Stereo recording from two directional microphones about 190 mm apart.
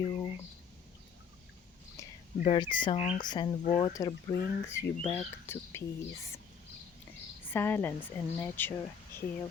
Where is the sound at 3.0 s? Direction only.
40° left (ahead or behind).